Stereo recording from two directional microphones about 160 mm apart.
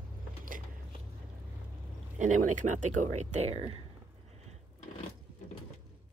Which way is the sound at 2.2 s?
50° right (ahead or behind).